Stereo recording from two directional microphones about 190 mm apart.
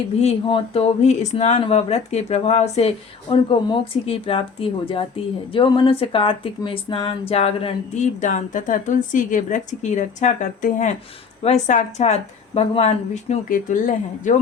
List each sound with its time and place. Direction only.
0.2 s speech: 30° left (ahead or behind)